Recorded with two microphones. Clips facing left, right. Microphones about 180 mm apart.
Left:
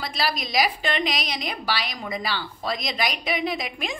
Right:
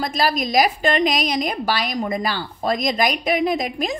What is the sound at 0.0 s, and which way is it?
A woman's voice, 45° right (ahead or behind).